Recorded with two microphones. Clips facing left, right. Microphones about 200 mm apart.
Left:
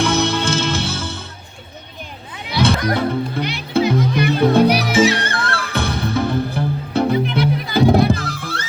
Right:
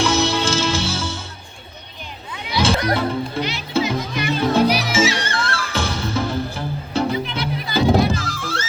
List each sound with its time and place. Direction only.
0.0 s music: 55° left (ahead or behind)
2.5 s music: 60° left (ahead or behind)